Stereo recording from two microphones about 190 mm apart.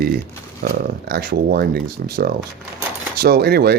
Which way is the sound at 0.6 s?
55° right (ahead or behind).